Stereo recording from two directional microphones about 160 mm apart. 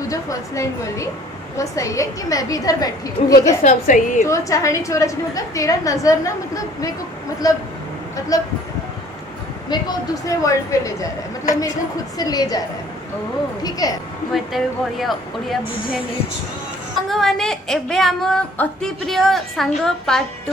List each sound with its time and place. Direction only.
0.1 s a woman's voice: 20° left (ahead or behind)
3.6 s a woman's voice: 55° left (ahead or behind)
4.3 s a woman's voice: 20° left (ahead or behind)
9.7 s a woman's voice: 25° left (ahead or behind)
12.2 s a woman's voice: 25° left (ahead or behind)
14.3 s a woman's voice: centre (ahead or behind)
17.1 s a woman's voice: 5° left (ahead or behind)